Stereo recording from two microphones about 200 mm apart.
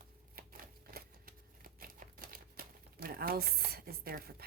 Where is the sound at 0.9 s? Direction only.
45° right (ahead or behind).